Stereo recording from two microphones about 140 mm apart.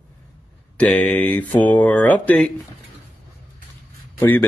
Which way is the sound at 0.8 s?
10° left (ahead or behind).